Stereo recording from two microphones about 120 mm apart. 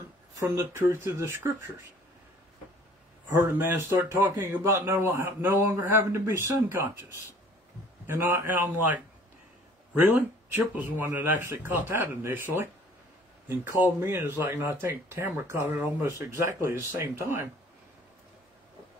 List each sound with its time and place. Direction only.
0.4 s a man's voice: 25° right (ahead or behind)
3.3 s a man's voice: 15° right (ahead or behind)
8.1 s a man's voice: 20° right (ahead or behind)